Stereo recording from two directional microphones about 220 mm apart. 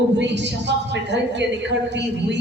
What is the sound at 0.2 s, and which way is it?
Speech, 50° right (ahead or behind).